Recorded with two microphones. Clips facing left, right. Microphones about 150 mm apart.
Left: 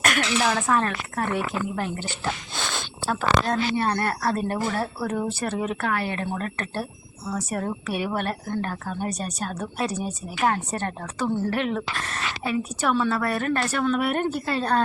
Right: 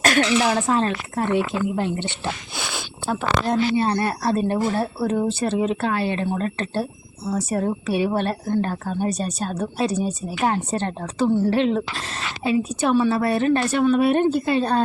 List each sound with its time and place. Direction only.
0.0 s a woman's voice: 30° right (ahead or behind)
2.6 s a woman's voice: 10° right (ahead or behind)